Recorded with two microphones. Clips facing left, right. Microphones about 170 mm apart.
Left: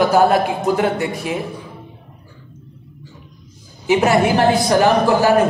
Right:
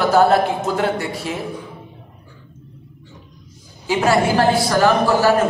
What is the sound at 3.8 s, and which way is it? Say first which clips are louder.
Speech: left 2 dB; 20° left (ahead or behind).